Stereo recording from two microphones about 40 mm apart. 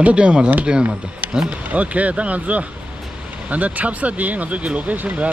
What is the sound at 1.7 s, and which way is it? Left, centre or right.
Speech, right.